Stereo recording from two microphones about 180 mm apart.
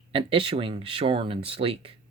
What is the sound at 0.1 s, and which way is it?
Speech, 30° right (ahead or behind).